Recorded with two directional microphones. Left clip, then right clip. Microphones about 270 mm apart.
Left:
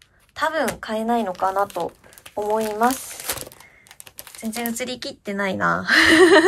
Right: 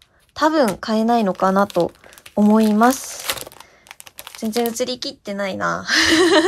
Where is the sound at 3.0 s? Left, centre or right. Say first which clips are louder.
Right 5 dB; centre.